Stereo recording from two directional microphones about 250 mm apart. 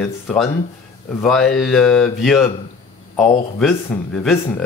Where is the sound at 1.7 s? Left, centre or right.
Centre.